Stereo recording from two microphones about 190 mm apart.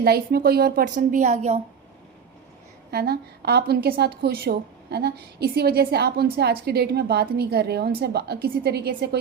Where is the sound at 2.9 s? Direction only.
55° right (ahead or behind).